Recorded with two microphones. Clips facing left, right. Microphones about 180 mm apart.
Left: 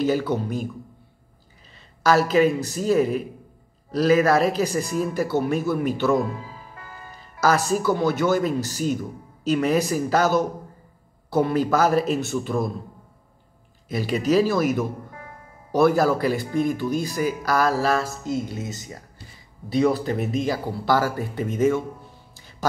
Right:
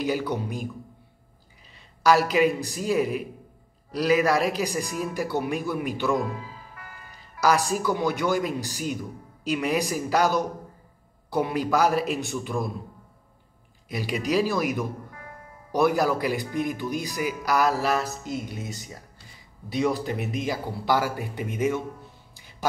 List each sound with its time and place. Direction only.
0.0 s speech: 15° right (ahead or behind)
2.0 s speech: 15° right (ahead or behind)
7.3 s speech: 15° right (ahead or behind)
13.8 s speech: 15° right (ahead or behind)